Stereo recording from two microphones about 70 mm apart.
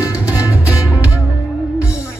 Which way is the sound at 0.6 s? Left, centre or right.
Right.